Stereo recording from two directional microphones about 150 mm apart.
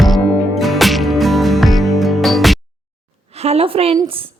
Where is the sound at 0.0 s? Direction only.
Centre (ahead or behind).